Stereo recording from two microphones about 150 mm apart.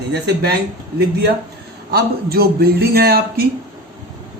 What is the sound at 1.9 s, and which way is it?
Speech, 90° right.